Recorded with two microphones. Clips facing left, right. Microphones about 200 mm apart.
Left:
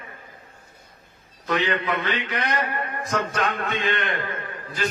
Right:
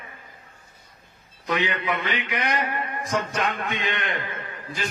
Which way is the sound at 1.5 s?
15° right (ahead or behind).